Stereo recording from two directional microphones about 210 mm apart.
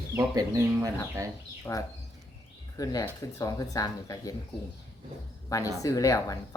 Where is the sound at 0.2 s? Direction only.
15° right (ahead or behind).